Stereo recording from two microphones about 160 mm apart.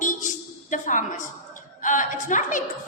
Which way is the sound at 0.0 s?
55° left (ahead or behind).